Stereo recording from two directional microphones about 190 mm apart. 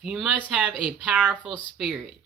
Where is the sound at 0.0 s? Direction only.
5° right (ahead or behind).